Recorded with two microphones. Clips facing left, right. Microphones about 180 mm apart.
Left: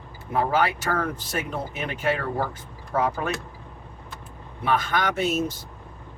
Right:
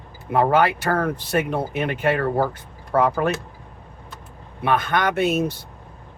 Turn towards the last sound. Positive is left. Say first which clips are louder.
# right 4 dB
turn(degrees=-60)  # may be behind; listen again after turning